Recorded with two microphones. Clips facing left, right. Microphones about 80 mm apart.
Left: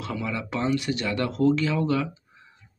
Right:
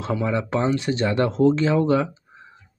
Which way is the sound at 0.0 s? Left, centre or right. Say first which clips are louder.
Right 7 dB; right.